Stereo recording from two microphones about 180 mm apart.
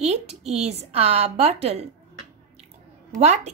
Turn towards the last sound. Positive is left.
turn(degrees=-40)  # may be behind; listen again after turning